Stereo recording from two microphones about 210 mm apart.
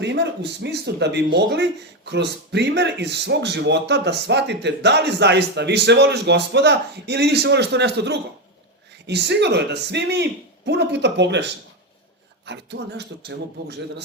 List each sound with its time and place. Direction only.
0.0 s speech: 55° right (ahead or behind)